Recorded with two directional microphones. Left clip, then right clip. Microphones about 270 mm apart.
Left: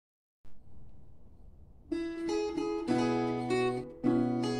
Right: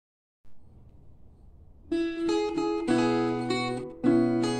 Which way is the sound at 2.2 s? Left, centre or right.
Right.